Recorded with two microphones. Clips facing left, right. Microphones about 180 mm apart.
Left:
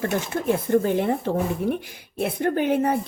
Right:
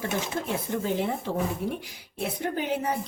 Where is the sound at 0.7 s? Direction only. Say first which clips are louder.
Left 13 dB; 60° left (ahead or behind).